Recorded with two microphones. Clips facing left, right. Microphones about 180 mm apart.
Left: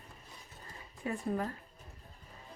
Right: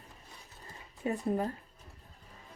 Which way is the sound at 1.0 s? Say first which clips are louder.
Right 3 dB; 25° right (ahead or behind).